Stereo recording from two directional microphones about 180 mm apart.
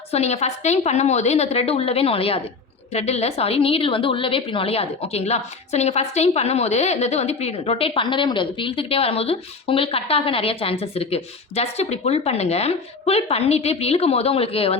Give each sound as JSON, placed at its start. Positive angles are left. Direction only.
{"t": 0.1, "sound": "a woman's voice", "side_deg": 35}